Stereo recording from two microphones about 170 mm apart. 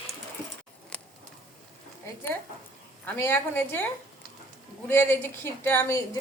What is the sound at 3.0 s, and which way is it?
A woman's voice, 10° left (ahead or behind).